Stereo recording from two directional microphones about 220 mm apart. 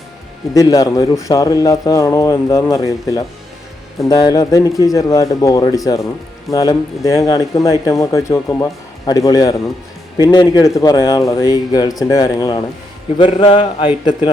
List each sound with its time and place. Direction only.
0.5 s speech: 15° left (ahead or behind)